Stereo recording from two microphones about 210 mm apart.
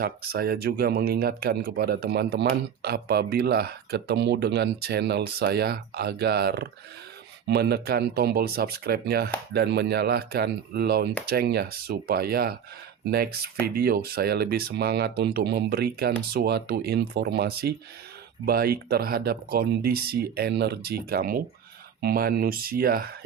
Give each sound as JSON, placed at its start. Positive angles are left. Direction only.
{"t": 0.0, "sound": "speech", "side_deg": -50}